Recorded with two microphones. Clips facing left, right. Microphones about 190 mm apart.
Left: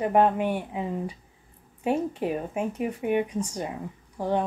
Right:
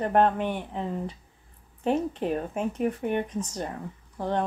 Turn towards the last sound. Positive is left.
turn(degrees=10)  # may be behind; listen again after turning